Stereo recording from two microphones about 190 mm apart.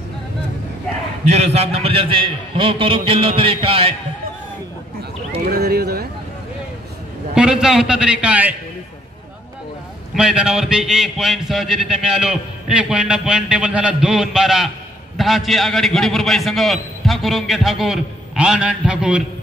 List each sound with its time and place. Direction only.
1.2 s a man's voice: 35° right (ahead or behind)
5.4 s speech: 55° right (ahead or behind)
7.3 s a man's voice: 5° right (ahead or behind)
10.1 s a man's voice: 5° right (ahead or behind)